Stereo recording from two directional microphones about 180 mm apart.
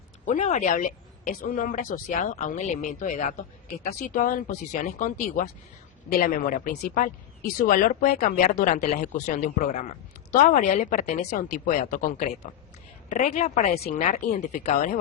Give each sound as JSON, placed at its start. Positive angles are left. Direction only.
{"t": 0.3, "sound": "a woman's voice", "side_deg": 40}